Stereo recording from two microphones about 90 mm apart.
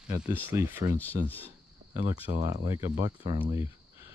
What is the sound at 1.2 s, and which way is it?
Speech, 20° left (ahead or behind).